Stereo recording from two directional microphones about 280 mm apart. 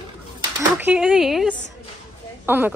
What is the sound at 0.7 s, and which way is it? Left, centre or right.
Speech, centre.